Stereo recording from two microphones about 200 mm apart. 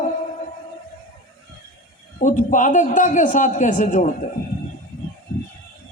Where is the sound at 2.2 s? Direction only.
40° left (ahead or behind).